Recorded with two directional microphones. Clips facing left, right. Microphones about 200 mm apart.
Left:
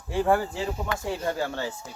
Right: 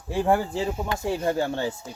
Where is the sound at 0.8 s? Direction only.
20° right (ahead or behind).